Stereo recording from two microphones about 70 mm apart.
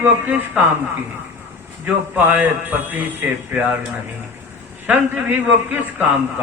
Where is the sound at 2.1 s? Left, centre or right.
Right.